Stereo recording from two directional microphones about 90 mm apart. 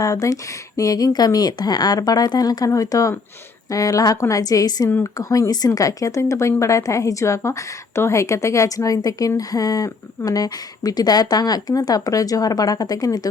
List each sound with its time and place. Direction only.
0.0 s a woman's voice: 40° left (ahead or behind)